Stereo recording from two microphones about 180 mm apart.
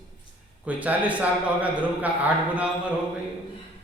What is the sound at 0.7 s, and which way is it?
Speech, 10° right (ahead or behind).